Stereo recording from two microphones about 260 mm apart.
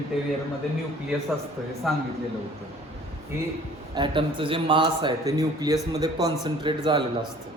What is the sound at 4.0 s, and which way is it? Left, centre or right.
A man's voice, centre.